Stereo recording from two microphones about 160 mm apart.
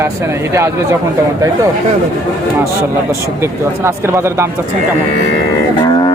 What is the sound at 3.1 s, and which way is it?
Speech, 15° right (ahead or behind).